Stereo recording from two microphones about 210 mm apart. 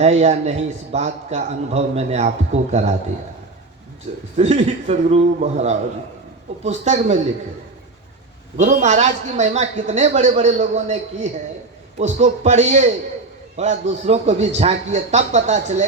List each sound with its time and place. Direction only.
0.0 s a man's voice: 30° right (ahead or behind)
4.4 s a man's voice: 30° right (ahead or behind)
8.5 s a man's voice: 35° right (ahead or behind)